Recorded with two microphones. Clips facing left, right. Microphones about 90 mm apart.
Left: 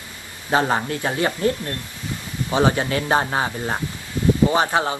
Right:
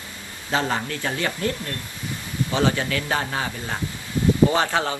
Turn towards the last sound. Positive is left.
turn(degrees=20)  # may be behind; listen again after turning